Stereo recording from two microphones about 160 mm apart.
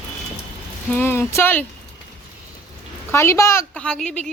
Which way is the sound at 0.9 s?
15° left (ahead or behind).